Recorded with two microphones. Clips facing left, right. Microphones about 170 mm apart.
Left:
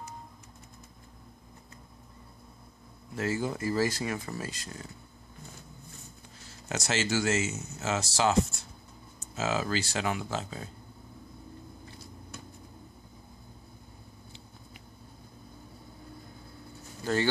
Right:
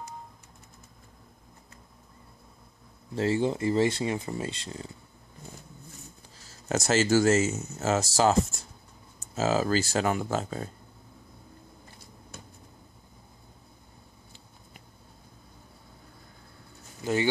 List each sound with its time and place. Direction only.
3.2 s speech: 30° right (ahead or behind)
6.7 s speech: 45° right (ahead or behind)
17.0 s speech: 15° right (ahead or behind)